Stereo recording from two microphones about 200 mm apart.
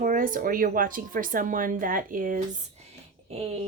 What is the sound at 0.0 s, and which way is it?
Speech, 40° right (ahead or behind).